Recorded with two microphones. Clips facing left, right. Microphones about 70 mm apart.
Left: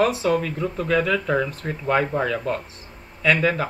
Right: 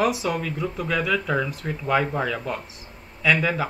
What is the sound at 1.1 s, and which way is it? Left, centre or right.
Speech, centre.